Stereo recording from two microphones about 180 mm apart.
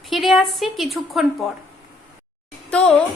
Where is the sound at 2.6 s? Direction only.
5° left (ahead or behind).